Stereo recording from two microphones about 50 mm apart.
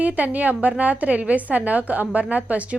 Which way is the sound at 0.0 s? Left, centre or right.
Right.